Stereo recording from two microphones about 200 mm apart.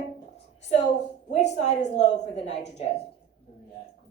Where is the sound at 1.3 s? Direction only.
35° left (ahead or behind).